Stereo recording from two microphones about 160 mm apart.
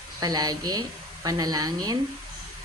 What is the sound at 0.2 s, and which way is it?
A woman's voice, 25° right (ahead or behind).